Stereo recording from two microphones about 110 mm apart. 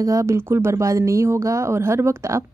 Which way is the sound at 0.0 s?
30° right (ahead or behind).